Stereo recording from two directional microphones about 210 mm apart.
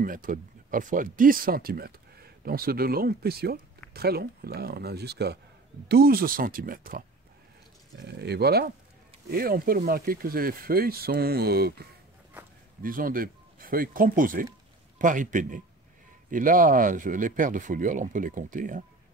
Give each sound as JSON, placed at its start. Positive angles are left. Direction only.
{"t": 0.0, "sound": "speech", "side_deg": -40}
{"t": 8.0, "sound": "speech", "side_deg": -50}